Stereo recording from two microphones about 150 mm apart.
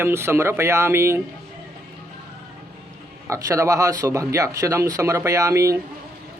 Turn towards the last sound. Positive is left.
turn(degrees=-20)  # may be behind; listen again after turning